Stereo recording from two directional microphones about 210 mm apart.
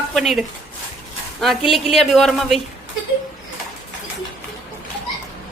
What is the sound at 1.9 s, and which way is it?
Speech, centre (ahead or behind).